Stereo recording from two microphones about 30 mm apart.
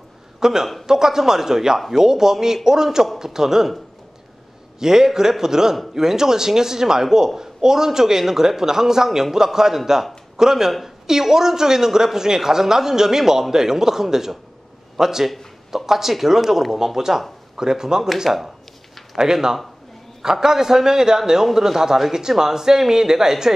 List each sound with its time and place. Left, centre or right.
0.4 s a man's voice: centre
4.7 s a man's voice: centre
18.2 s speech: centre
19.1 s a man's voice: centre